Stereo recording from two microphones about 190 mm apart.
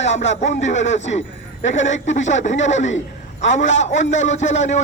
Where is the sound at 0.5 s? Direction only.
40° left (ahead or behind).